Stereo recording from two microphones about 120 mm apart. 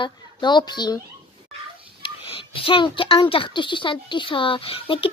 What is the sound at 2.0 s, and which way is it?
A child's voice, 45° left (ahead or behind).